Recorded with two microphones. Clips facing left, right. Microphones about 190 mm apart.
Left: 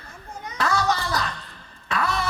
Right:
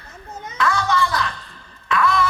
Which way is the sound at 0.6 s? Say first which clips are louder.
Right 3 dB; 40° left (ahead or behind).